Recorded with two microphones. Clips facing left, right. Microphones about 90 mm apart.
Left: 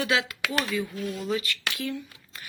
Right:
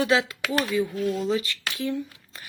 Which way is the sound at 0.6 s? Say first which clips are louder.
Right 6 dB; 15° right (ahead or behind).